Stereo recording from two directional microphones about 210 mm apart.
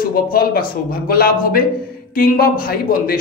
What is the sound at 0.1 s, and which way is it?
A man's voice, 45° left (ahead or behind).